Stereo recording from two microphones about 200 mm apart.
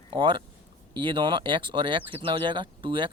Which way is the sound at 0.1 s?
25° right (ahead or behind).